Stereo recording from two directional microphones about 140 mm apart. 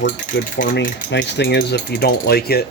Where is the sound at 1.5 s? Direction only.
90° left.